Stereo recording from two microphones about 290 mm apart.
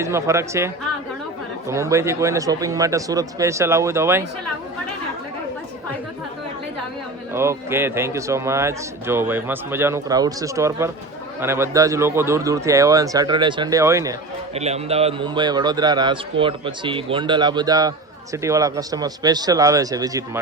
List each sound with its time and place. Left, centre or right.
0.0 s a man's voice: centre
7.3 s a man's voice: centre